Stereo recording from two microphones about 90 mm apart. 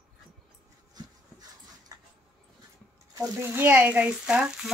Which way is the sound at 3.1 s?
35° right (ahead or behind).